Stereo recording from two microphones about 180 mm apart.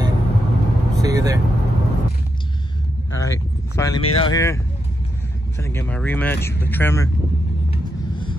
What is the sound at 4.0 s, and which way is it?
Speech, 30° left (ahead or behind).